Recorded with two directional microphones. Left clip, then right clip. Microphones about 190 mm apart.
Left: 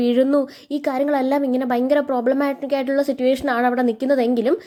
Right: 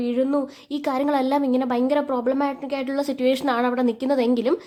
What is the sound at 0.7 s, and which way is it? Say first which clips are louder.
A woman's voice: left 2 dB; 10° left (ahead or behind).